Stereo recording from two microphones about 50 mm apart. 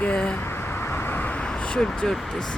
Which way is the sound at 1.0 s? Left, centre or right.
Left.